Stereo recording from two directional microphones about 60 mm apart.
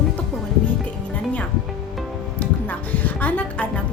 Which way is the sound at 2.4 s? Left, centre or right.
Left.